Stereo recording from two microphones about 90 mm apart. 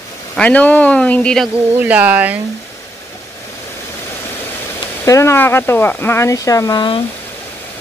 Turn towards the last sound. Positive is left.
turn(degrees=60)  # may be behind; listen again after turning